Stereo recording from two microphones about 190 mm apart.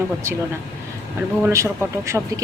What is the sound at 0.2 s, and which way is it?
Speech, 15° right (ahead or behind).